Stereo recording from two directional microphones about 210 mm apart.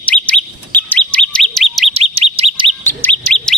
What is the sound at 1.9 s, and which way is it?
Bird, 30° right (ahead or behind).